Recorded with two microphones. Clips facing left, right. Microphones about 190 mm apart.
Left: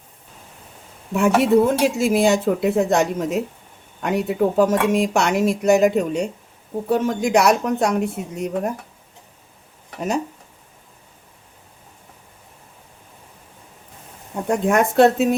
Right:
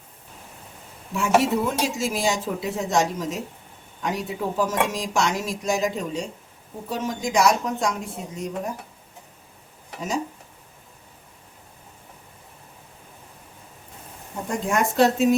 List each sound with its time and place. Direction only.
1.1 s speech: 60° left (ahead or behind)
14.4 s speech: 65° left (ahead or behind)